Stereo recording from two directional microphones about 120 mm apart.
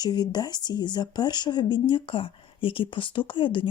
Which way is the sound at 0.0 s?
35° left (ahead or behind).